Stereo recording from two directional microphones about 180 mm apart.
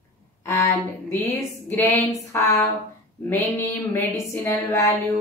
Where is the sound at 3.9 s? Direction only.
15° left (ahead or behind).